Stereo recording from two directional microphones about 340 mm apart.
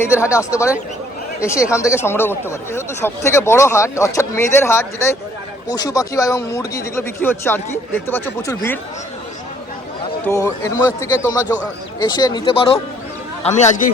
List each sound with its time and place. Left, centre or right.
0.1 s speech: centre
10.2 s a man's voice: centre